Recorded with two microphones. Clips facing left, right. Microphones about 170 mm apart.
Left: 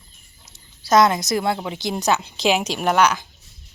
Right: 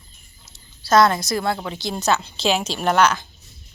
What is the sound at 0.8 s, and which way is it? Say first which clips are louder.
A woman's voice: even; 15° left (ahead or behind).